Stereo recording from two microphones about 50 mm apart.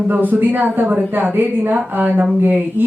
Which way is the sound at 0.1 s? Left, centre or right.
Right.